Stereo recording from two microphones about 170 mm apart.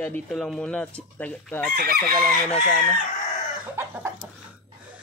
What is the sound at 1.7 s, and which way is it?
Chicken, 65° right (ahead or behind).